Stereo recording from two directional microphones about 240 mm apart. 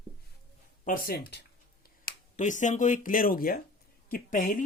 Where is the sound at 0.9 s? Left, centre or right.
Left.